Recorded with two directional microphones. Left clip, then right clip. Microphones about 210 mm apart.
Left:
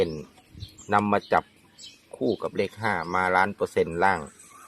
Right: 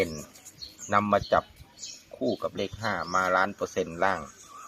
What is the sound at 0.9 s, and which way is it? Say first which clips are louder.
Speech: left 1 dB; 50° left (ahead or behind).